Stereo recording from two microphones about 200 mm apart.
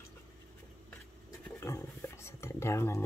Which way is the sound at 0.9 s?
15° left (ahead or behind).